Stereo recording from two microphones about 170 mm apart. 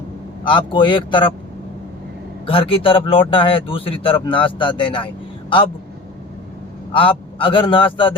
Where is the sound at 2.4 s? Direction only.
30° left (ahead or behind).